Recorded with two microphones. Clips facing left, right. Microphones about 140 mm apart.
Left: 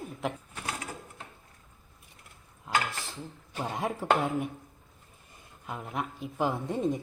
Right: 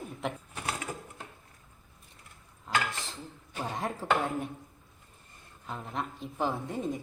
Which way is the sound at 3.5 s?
5° left (ahead or behind).